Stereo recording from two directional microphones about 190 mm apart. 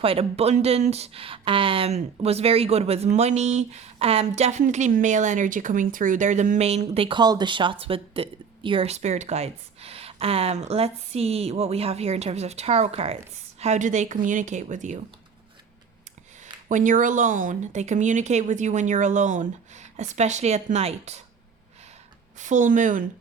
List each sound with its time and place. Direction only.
0.0 s speech: 30° right (ahead or behind)
16.6 s speech: 45° right (ahead or behind)
22.4 s a woman's voice: 40° right (ahead or behind)